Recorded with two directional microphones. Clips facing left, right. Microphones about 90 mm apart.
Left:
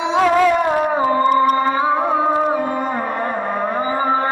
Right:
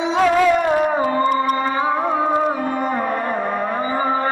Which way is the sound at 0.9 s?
30° left (ahead or behind).